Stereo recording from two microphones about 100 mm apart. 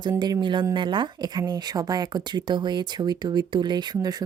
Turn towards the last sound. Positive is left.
turn(degrees=-45)  # may be behind; listen again after turning